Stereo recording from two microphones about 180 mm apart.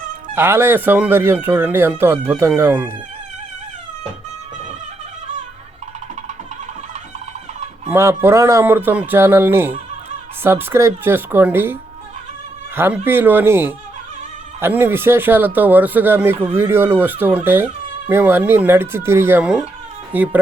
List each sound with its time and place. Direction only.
0.3 s speech: 10° right (ahead or behind)
7.9 s speech: 15° right (ahead or behind)